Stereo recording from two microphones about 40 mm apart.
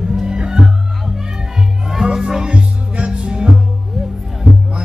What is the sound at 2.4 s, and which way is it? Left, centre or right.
Music, right.